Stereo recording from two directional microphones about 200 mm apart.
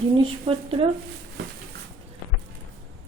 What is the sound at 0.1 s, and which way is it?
Speech, 30° right (ahead or behind).